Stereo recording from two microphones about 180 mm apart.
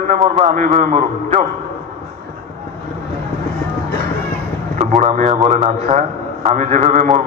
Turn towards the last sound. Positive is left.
turn(degrees=-40)  # may be behind; listen again after turning